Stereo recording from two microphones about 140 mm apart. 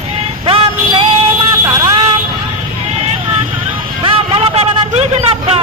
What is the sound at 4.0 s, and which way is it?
Vehicle, 40° right (ahead or behind).